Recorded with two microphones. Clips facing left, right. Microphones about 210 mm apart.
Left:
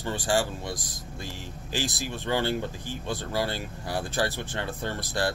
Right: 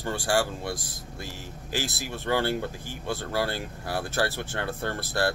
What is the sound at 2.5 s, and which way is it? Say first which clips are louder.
Speech: even; 10° right (ahead or behind).